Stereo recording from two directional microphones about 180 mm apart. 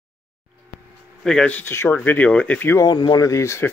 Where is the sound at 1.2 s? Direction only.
5° left (ahead or behind).